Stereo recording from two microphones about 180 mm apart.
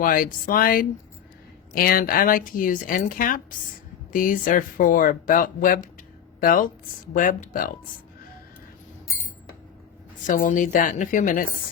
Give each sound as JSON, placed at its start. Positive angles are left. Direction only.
{"t": 0.0, "sound": "a woman's voice", "side_deg": 50}
{"t": 10.2, "sound": "speech", "side_deg": 45}